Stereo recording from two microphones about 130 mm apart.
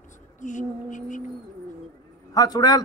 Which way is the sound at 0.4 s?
70° left (ahead or behind).